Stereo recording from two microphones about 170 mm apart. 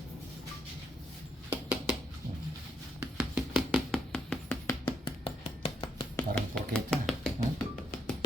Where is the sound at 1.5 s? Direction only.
10° right (ahead or behind).